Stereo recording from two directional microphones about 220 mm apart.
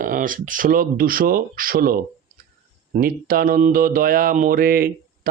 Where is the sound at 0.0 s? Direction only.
40° right (ahead or behind).